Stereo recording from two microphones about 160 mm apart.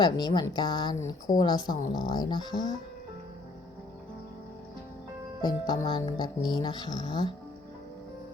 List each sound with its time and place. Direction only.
0.0 s speech: 25° left (ahead or behind)
5.4 s speech: 25° left (ahead or behind)